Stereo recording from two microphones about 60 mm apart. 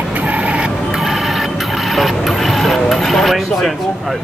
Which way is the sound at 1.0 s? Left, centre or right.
Centre.